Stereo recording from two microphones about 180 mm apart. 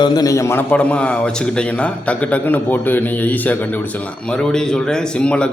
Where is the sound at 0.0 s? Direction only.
20° left (ahead or behind).